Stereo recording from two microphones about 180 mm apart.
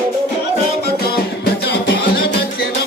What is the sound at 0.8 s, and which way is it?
Music, 60° left (ahead or behind).